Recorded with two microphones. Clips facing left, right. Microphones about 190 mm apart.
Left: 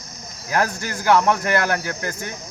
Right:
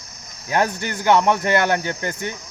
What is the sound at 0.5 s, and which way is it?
Speech, 25° right (ahead or behind).